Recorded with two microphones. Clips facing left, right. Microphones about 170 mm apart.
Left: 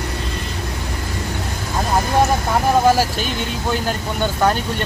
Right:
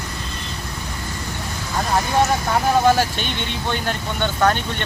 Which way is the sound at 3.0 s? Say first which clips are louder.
Left 2 dB; 5° left (ahead or behind).